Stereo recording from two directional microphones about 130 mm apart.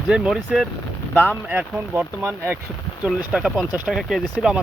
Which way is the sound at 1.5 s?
15° right (ahead or behind).